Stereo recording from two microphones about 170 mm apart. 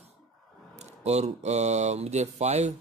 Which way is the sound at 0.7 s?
40° right (ahead or behind).